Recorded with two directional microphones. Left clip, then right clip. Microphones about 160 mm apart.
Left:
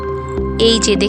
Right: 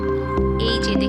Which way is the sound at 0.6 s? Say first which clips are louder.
Left 9 dB; 55° left (ahead or behind).